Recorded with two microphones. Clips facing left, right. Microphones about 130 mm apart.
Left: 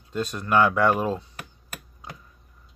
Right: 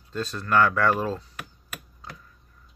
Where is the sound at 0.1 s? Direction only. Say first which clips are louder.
Left 1 dB; 15° left (ahead or behind).